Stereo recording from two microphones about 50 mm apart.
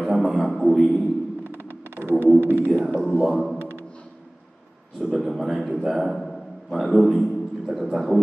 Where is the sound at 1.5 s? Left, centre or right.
Right.